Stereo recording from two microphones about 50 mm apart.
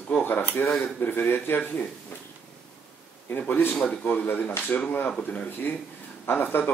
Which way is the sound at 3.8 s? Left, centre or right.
Left.